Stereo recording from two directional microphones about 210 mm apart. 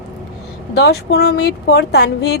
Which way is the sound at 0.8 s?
50° left (ahead or behind).